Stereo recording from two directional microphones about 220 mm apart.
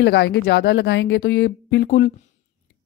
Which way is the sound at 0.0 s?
50° left (ahead or behind).